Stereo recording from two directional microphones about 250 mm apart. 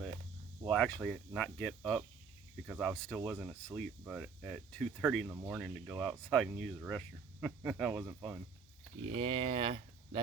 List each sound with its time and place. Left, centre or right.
0.7 s speech: centre
9.1 s speech: right